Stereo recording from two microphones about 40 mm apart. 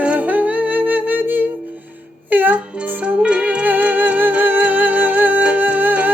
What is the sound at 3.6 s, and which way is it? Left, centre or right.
Music, right.